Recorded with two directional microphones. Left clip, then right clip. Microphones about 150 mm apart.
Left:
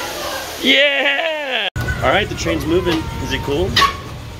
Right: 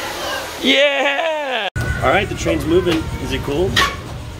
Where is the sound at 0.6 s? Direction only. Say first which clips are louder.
Left 1 dB; centre (ahead or behind).